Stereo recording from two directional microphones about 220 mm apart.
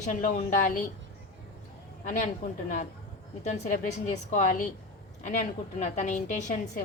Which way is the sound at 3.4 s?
30° left (ahead or behind).